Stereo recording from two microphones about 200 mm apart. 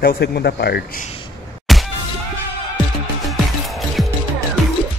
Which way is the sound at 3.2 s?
Centre (ahead or behind).